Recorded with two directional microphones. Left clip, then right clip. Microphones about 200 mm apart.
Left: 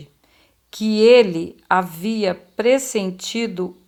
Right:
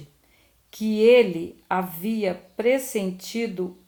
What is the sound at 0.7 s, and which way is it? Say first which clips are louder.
Speech: left 4 dB; 25° left (ahead or behind).